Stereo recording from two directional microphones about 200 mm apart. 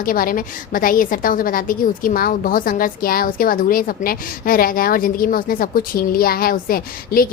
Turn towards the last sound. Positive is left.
turn(degrees=45)  # may be behind; listen again after turning